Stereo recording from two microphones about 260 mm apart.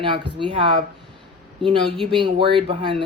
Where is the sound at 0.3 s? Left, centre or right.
Centre.